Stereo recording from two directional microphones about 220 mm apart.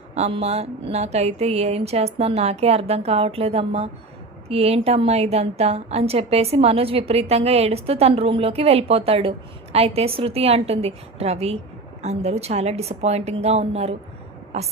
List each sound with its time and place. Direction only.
0.1 s a woman's voice: 30° right (ahead or behind)